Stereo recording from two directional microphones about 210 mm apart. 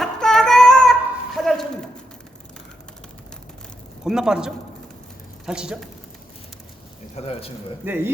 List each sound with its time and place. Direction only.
0.0 s child singing: centre (ahead or behind)
1.4 s a sound: centre (ahead or behind)
4.0 s a man's voice: 5° right (ahead or behind)
7.2 s speech: 30° left (ahead or behind)
7.9 s a man's voice: 10° right (ahead or behind)